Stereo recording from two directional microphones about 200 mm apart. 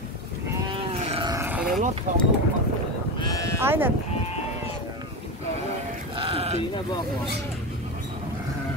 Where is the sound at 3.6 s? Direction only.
10° right (ahead or behind).